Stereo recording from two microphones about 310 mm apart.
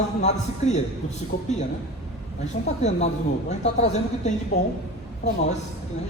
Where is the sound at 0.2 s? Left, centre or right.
Left.